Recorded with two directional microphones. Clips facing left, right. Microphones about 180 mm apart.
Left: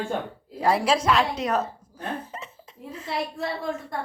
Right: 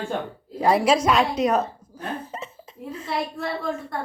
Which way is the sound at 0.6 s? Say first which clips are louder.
Right 3 dB; 15° right (ahead or behind).